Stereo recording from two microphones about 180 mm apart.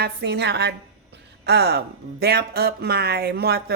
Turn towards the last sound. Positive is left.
turn(degrees=-60)  # may be behind; listen again after turning